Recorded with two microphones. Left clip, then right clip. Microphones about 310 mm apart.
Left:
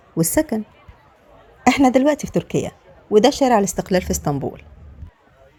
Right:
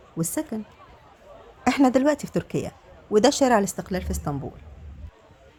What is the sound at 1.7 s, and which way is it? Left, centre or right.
A woman's voice, centre.